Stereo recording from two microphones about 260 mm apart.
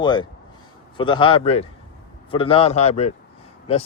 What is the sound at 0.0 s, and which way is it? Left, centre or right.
Speech, centre.